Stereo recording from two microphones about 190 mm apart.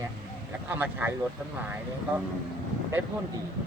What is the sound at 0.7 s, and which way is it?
Speech, 10° right (ahead or behind).